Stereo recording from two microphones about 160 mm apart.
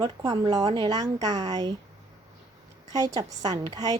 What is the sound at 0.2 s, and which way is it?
Speech, 25° right (ahead or behind).